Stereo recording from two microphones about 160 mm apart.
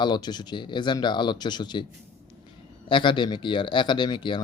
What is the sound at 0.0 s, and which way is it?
Speech, 25° left (ahead or behind).